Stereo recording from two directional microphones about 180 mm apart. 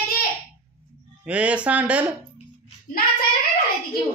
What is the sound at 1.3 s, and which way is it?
Speech, 5° right (ahead or behind).